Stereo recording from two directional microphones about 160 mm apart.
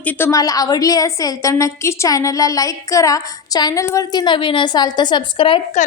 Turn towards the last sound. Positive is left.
turn(degrees=30)  # may be behind; listen again after turning